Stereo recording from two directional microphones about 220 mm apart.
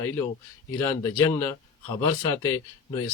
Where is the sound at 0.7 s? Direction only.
10° left (ahead or behind).